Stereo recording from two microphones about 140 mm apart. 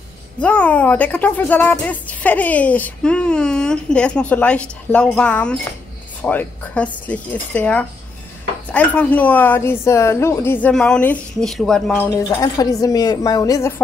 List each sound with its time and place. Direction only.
0.4 s speech: 10° left (ahead or behind)
10.7 s speech: 5° left (ahead or behind)
12.1 s a woman's voice: 25° left (ahead or behind)